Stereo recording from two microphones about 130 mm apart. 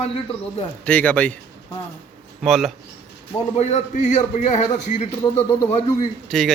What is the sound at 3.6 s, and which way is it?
A man's voice, 60° left (ahead or behind).